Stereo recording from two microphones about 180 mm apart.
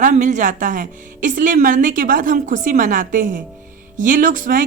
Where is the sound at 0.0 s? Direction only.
45° right (ahead or behind).